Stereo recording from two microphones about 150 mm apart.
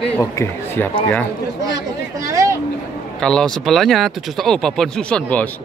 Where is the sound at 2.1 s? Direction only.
20° right (ahead or behind).